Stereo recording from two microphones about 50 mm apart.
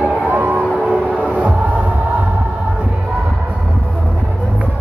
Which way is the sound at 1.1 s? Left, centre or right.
Right.